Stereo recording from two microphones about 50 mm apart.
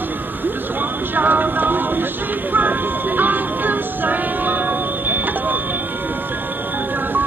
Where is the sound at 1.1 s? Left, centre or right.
Right.